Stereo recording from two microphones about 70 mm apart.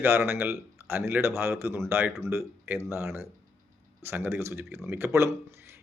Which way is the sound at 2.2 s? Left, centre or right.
Right.